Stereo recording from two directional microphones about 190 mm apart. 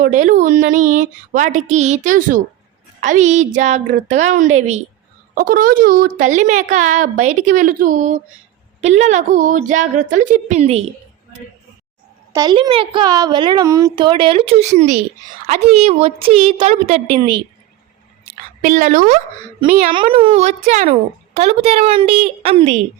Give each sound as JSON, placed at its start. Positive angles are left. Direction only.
{"t": 0.0, "sound": "a woman's voice", "side_deg": -45}
{"t": 12.3, "sound": "a child's voice", "side_deg": -20}
{"t": 17.2, "sound": "a child's voice", "side_deg": -25}
{"t": 18.6, "sound": "a woman's voice", "side_deg": -45}